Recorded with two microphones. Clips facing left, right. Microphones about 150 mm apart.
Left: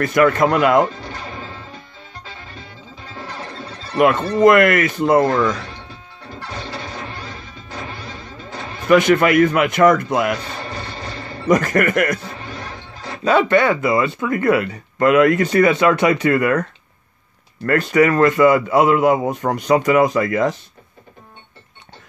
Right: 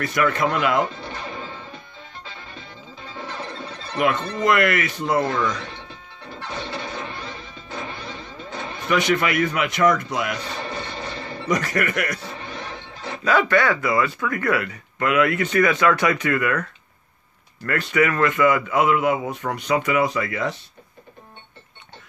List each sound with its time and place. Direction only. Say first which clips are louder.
0.0 s speech: left 7 dB; 45° left (ahead or behind)
4.0 s speech: left 9 dB; 50° left (ahead or behind)
8.8 s speech: left 8 dB; 50° left (ahead or behind)
11.4 s speech: left 7 dB; 50° left (ahead or behind)
13.2 s speech: left 4 dB; 25° left (ahead or behind)
15.0 s a man's voice: left 7 dB; 40° left (ahead or behind)
17.6 s a man's voice: left 6 dB; 40° left (ahead or behind)